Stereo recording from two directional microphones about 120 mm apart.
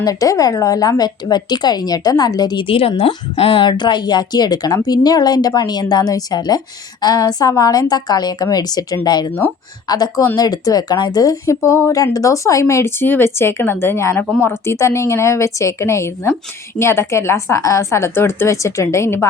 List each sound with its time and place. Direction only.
0.0 s a woman's voice: 30° left (ahead or behind)
2.6 s a woman's voice: 50° left (ahead or behind); by 19.3 s 25° left (ahead or behind)